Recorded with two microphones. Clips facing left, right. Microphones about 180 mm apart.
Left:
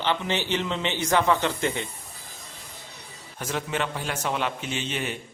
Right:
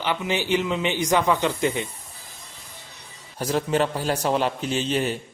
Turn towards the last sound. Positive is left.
turn(degrees=-35)  # may be behind; listen again after turning